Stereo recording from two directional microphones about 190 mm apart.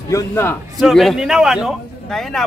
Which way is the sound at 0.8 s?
Centre (ahead or behind).